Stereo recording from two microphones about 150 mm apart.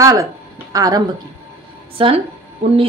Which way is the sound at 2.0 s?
40° right (ahead or behind).